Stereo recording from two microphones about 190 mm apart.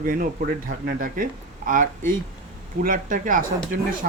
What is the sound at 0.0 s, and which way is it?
Speech, 45° right (ahead or behind).